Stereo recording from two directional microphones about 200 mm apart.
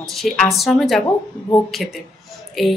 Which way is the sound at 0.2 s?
Centre (ahead or behind).